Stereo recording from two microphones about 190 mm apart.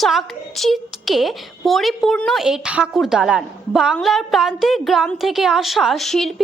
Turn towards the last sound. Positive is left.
turn(degrees=0)  # may be behind; listen again after turning